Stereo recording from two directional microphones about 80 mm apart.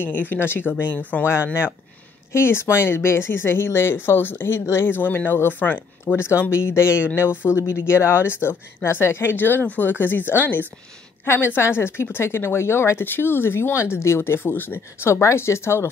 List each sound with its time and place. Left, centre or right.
0.0 s speech: left